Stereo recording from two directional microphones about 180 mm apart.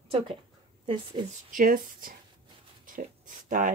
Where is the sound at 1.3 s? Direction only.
50° right (ahead or behind).